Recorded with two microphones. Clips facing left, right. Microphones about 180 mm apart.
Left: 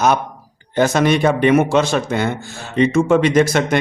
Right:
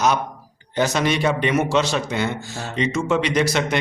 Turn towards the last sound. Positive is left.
turn(degrees=50)  # may be behind; listen again after turning